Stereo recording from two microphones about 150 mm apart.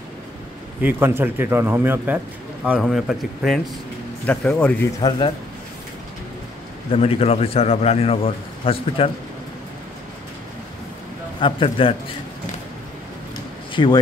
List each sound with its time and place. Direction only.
0.8 s a man's voice: 15° right (ahead or behind); by 4.8 s 10° left (ahead or behind)
6.9 s a man's voice: 40° left (ahead or behind)
11.4 s a man's voice: 35° left (ahead or behind)
13.8 s a man's voice: 30° left (ahead or behind)